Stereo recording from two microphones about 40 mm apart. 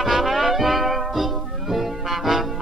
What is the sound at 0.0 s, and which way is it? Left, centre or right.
Music, centre.